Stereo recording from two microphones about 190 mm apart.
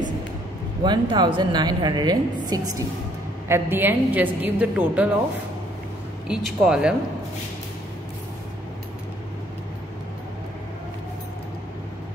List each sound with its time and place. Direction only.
0.8 s a woman's voice: 25° right (ahead or behind); by 5.1 s 5° right (ahead or behind)
6.2 s speech: 5° right (ahead or behind)